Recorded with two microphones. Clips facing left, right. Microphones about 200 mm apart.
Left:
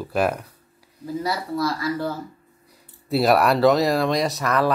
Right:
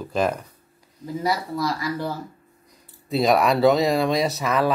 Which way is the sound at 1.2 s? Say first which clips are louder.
Right 1 dB; 15° right (ahead or behind).